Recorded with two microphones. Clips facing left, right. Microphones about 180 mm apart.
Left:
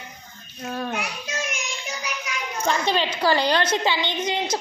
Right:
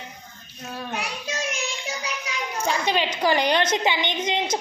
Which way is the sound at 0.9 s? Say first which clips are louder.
Even; 30° right (ahead or behind).